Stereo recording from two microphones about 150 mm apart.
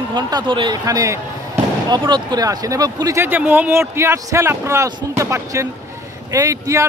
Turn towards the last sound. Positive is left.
turn(degrees=-20)  # may be behind; listen again after turning